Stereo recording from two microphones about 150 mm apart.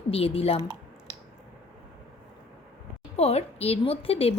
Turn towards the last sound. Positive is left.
turn(degrees=40)  # may be behind; listen again after turning